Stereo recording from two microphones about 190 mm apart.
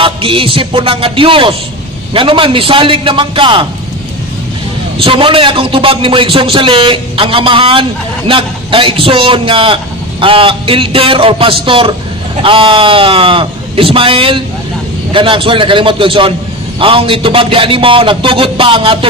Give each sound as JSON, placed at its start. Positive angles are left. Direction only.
{"t": 0.0, "sound": "a man's voice", "side_deg": -30}
{"t": 4.9, "sound": "a man's voice", "side_deg": -30}